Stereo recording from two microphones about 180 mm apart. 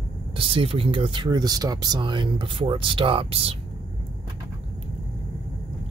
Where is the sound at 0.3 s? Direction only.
30° right (ahead or behind).